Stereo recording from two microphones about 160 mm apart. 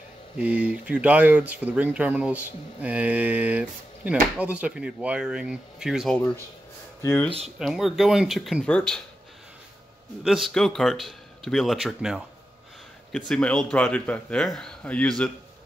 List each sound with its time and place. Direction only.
0.4 s speech: 10° right (ahead or behind)
7.0 s speech: 15° left (ahead or behind)
7.2 s speech: 40° right (ahead or behind)
7.5 s speech: centre (ahead or behind)
10.2 s speech: centre (ahead or behind)
13.3 s speech: 5° left (ahead or behind)